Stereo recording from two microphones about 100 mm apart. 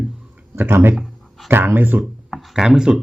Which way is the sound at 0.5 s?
25° right (ahead or behind).